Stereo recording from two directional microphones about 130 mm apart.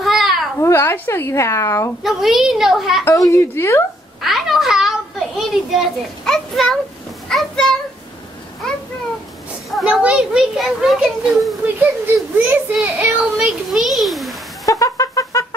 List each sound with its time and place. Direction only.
0.0 s babbling: centre (ahead or behind)
0.6 s speech: 20° left (ahead or behind)
2.0 s a child's voice: centre (ahead or behind)
3.1 s speech: 25° left (ahead or behind)
4.2 s a sound: centre (ahead or behind)
7.2 s a child's voice: 5° left (ahead or behind)
9.7 s a child's voice: 5° right (ahead or behind)
11.6 s a child's voice: 15° right (ahead or behind)
14.7 s a sound: 25° left (ahead or behind)